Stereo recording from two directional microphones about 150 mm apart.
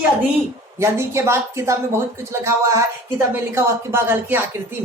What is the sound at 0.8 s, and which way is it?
A woman's voice, 20° right (ahead or behind).